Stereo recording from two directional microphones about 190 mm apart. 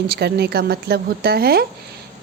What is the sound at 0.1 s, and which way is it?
A woman's voice, 60° right (ahead or behind).